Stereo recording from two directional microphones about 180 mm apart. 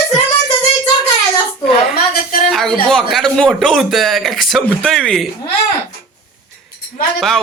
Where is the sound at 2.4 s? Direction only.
Centre (ahead or behind).